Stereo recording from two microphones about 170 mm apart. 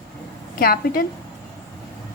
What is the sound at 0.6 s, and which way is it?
Speech, 60° left (ahead or behind).